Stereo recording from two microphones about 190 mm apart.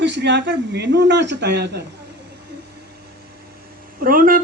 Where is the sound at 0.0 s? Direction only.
65° right (ahead or behind).